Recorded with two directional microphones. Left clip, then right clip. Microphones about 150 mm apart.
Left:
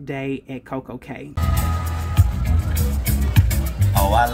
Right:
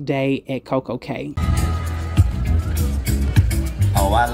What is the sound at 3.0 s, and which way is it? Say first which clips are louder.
Music: even; 75° left (ahead or behind).